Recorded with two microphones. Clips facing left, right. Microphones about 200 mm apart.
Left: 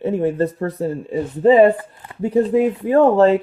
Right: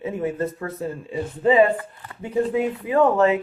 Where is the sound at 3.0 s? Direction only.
35° left (ahead or behind).